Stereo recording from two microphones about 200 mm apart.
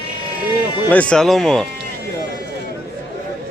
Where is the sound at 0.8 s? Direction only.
5° left (ahead or behind).